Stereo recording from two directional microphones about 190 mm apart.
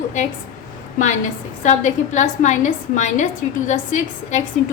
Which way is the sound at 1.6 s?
40° left (ahead or behind).